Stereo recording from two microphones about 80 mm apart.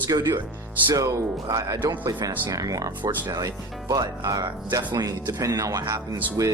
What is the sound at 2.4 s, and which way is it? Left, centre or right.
Speech, right.